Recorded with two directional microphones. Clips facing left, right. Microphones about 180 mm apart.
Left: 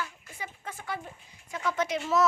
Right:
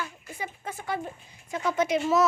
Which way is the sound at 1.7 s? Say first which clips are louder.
Right 6 dB; 10° right (ahead or behind).